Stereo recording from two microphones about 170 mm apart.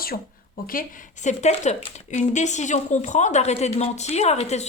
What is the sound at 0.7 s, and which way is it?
Speech, 55° left (ahead or behind).